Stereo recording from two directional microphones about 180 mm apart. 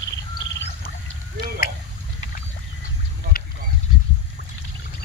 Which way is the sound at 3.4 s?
55° left (ahead or behind).